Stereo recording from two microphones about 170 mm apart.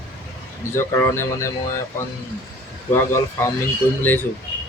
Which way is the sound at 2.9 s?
15° left (ahead or behind).